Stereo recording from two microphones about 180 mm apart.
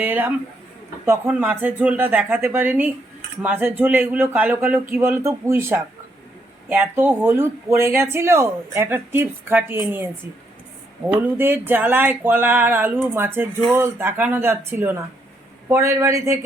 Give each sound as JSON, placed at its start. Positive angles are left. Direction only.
{"t": 0.0, "sound": "speech", "side_deg": -10}
{"t": 11.3, "sound": "speech", "side_deg": -10}